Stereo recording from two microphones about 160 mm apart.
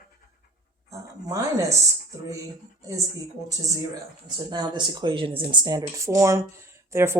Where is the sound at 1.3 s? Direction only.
20° right (ahead or behind).